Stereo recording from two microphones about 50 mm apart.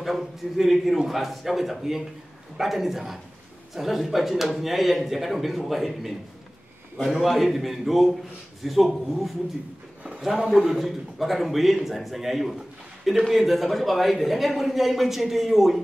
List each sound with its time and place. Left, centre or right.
0.0 s a man's voice: centre